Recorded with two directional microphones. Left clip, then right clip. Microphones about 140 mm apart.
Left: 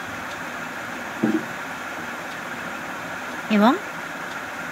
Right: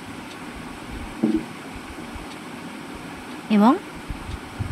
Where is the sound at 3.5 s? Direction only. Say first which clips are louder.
Even; 30° right (ahead or behind).